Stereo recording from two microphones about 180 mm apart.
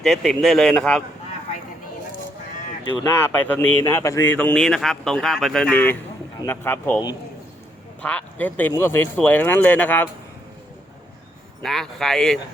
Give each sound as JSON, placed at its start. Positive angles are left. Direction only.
{"t": 0.0, "sound": "speech", "side_deg": 0}
{"t": 2.8, "sound": "speech", "side_deg": 20}
{"t": 3.4, "sound": "speech", "side_deg": 10}
{"t": 8.0, "sound": "speech", "side_deg": 10}
{"t": 11.6, "sound": "speech", "side_deg": 0}